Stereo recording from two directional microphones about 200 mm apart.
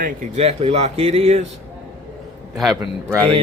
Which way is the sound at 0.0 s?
30° right (ahead or behind).